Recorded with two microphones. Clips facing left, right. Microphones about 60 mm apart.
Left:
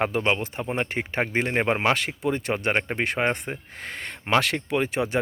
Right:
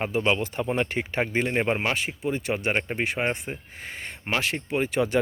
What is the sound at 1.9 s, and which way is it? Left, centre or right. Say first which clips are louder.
Speech: left 3 dB; left.